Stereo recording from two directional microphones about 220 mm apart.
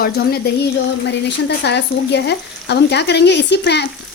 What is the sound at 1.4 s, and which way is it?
Speech, 50° left (ahead or behind).